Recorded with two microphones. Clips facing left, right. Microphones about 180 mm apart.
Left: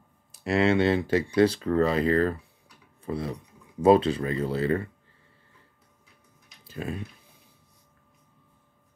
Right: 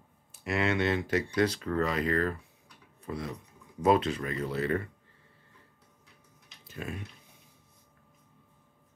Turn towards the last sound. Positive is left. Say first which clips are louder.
# left 6 dB
turn(degrees=30)  # may be behind; listen again after turning